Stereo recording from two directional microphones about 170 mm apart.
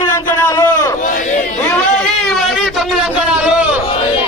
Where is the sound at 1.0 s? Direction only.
50° left (ahead or behind).